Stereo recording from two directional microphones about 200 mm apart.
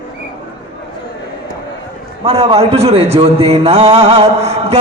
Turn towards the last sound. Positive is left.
turn(degrees=-30)  # may be behind; listen again after turning